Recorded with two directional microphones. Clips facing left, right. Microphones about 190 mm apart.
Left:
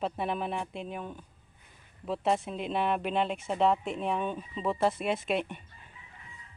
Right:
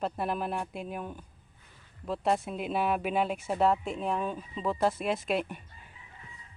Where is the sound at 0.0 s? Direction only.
Centre (ahead or behind).